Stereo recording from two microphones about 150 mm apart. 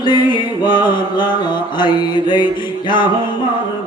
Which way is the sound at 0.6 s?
30° left (ahead or behind).